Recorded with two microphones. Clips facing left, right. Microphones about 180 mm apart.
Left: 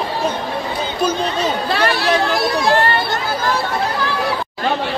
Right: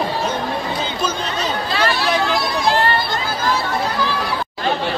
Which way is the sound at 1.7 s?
65° left (ahead or behind).